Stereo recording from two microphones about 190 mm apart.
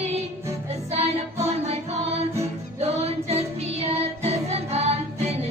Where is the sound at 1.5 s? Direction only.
35° right (ahead or behind).